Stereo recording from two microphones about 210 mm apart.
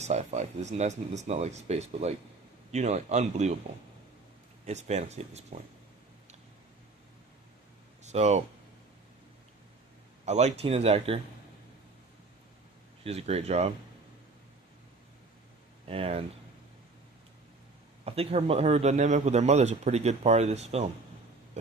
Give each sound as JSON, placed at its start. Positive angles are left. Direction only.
{"t": 0.0, "sound": "a man's voice", "side_deg": -30}
{"t": 4.6, "sound": "a man's voice", "side_deg": -35}
{"t": 8.0, "sound": "speech", "side_deg": -30}
{"t": 10.2, "sound": "speech", "side_deg": -30}
{"t": 13.1, "sound": "speech", "side_deg": -30}
{"t": 15.9, "sound": "speech", "side_deg": -30}
{"t": 18.0, "sound": "a man's voice", "side_deg": -30}